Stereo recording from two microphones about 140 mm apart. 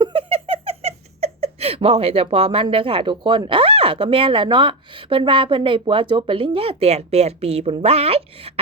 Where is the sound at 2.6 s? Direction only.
40° right (ahead or behind).